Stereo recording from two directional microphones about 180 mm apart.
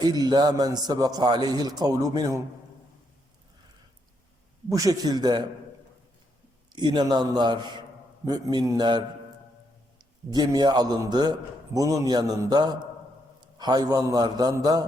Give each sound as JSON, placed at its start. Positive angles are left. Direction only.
{"t": 0.0, "sound": "a man's voice", "side_deg": -20}
{"t": 4.7, "sound": "a man's voice", "side_deg": -20}
{"t": 6.7, "sound": "a man's voice", "side_deg": -25}
{"t": 10.2, "sound": "a man's voice", "side_deg": -20}